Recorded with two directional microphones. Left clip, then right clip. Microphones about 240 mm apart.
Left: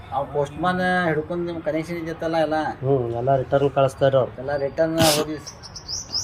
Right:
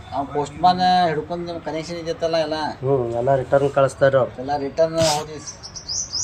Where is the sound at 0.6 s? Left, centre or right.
Centre.